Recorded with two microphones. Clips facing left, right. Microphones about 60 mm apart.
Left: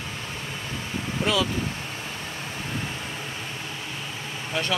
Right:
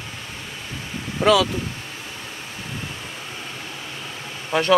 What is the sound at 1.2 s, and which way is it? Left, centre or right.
Speech, right.